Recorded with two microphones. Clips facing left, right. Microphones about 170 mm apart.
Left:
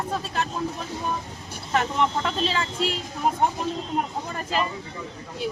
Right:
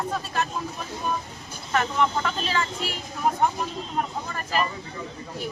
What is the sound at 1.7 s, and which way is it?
Speech, 25° left (ahead or behind).